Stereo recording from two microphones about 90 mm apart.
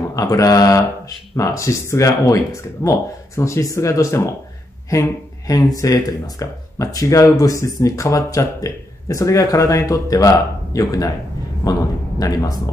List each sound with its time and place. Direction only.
0.1 s speech: 40° left (ahead or behind)
12.2 s speech: 40° left (ahead or behind)